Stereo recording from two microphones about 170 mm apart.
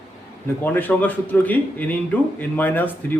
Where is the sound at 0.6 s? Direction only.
10° left (ahead or behind).